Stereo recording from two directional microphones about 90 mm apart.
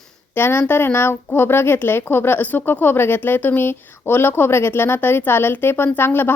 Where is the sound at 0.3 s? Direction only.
25° left (ahead or behind).